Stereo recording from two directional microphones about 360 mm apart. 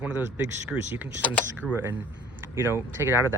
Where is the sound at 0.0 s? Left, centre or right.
Centre.